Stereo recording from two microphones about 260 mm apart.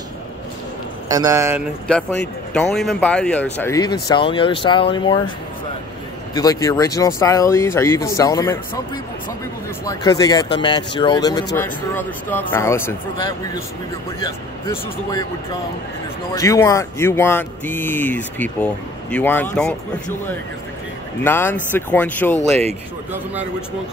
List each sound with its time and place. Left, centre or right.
1.1 s speech: centre
1.9 s speech: centre
6.3 s speech: centre
9.8 s speech: centre
14.7 s speech: centre
16.3 s speech: centre
21.2 s speech: centre